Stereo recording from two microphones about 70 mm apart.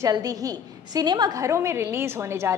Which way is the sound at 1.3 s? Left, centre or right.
Right.